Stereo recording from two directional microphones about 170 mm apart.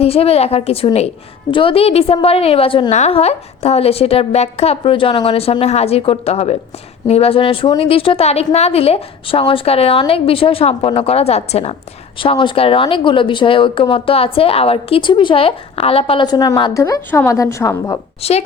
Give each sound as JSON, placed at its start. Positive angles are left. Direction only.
{"t": 0.0, "sound": "a woman's voice", "side_deg": 35}
{"t": 18.2, "sound": "a woman's voice", "side_deg": 35}